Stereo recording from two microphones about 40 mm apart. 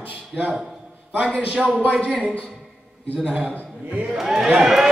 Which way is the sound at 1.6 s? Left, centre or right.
Right.